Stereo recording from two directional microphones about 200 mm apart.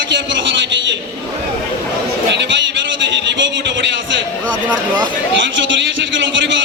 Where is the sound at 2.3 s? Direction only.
60° right (ahead or behind).